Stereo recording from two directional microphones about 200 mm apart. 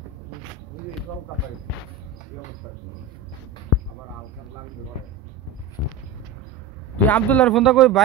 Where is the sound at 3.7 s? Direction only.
90° left.